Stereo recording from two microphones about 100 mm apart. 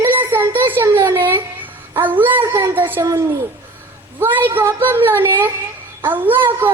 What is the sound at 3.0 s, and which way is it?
Speech, 35° right (ahead or behind).